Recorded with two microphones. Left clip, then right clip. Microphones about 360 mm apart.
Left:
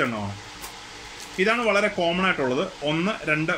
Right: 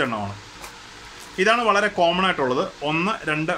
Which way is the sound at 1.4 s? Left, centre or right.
Right.